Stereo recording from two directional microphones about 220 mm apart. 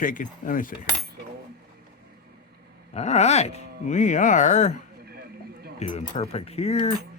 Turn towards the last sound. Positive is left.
turn(degrees=30)  # may be behind; listen again after turning